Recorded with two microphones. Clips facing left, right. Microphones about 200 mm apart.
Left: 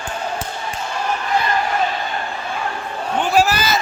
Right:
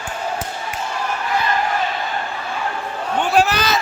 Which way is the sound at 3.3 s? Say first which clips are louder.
Even; 5° left (ahead or behind).